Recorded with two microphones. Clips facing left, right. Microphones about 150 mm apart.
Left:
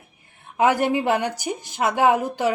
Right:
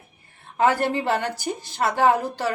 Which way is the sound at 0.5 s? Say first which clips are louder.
Left 2 dB; 15° left (ahead or behind).